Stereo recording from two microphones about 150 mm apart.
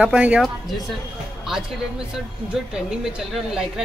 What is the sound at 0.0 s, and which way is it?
Speech, 10° right (ahead or behind).